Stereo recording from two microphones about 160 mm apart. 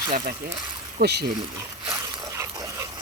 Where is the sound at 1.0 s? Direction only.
90° right.